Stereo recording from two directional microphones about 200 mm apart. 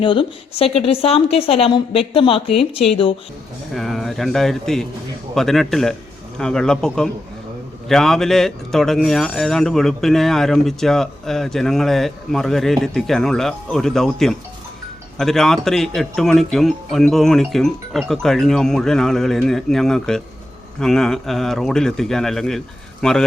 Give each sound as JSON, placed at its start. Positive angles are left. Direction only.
{"t": 0.0, "sound": "a woman's voice", "side_deg": 25}
{"t": 3.7, "sound": "speech", "side_deg": 0}